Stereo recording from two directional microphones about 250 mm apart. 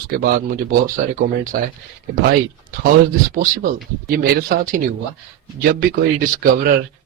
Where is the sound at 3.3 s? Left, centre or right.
Right.